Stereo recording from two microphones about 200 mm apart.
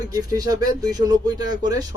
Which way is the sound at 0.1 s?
20° right (ahead or behind).